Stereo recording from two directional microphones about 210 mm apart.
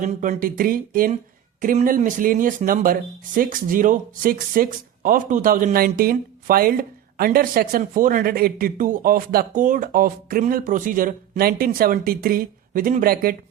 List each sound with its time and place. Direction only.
0.0 s speech: 40° right (ahead or behind)